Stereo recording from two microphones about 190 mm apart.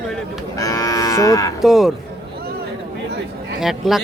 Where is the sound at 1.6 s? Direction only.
Centre (ahead or behind).